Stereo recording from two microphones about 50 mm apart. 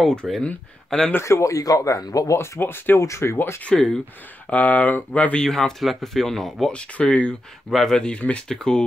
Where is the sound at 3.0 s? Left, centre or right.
Left.